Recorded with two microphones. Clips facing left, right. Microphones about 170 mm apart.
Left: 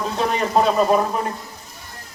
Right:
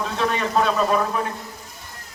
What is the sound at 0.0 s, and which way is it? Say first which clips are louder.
Speech: left 2 dB; 40° left (ahead or behind).